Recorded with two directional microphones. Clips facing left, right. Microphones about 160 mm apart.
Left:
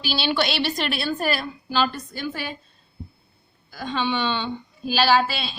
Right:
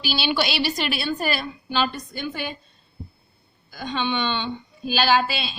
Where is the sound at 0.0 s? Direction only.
Centre (ahead or behind).